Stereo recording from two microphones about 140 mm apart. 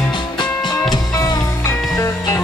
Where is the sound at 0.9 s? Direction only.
25° left (ahead or behind).